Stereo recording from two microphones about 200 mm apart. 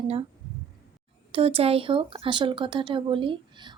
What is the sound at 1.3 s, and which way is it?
A woman's voice, 30° right (ahead or behind).